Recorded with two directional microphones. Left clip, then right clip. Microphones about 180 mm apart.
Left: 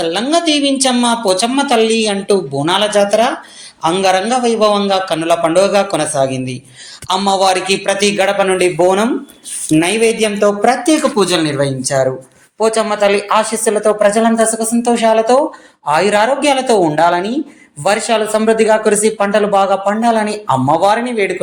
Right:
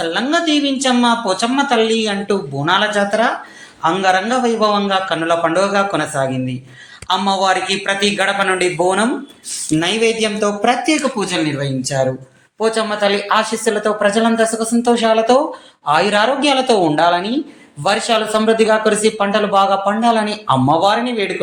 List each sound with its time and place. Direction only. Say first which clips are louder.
0.0 s speech: left 3 dB; 30° left (ahead or behind)
9.8 s speech: left 1 dB; 20° left (ahead or behind)